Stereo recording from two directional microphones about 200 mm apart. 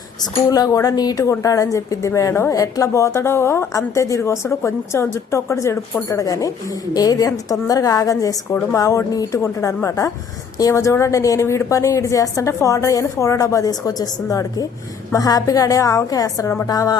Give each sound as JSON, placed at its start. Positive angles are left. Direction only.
{"t": 0.2, "sound": "a woman's voice", "side_deg": 20}